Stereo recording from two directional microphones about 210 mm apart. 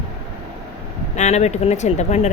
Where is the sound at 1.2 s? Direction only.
35° left (ahead or behind).